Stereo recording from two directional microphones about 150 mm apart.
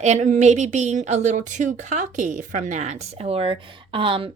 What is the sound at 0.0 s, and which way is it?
A woman's voice, 50° right (ahead or behind).